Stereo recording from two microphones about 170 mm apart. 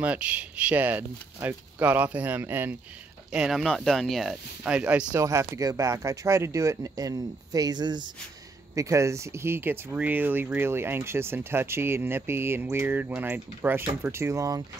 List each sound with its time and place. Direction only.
0.0 s speech: 10° right (ahead or behind)
5.1 s speech: 15° right (ahead or behind)